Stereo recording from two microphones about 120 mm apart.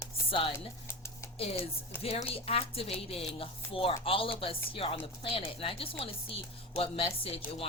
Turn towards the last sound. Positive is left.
turn(degrees=50)  # may be behind; listen again after turning